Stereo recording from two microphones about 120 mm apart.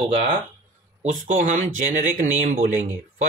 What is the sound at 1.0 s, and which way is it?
Speech, 90° right.